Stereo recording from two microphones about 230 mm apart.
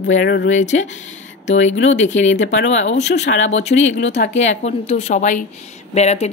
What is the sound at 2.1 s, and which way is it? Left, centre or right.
A woman's voice, left.